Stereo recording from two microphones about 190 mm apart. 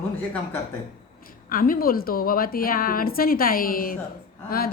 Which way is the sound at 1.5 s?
50° left (ahead or behind).